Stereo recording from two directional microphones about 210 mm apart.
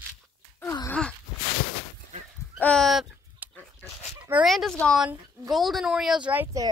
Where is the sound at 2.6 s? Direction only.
5° left (ahead or behind).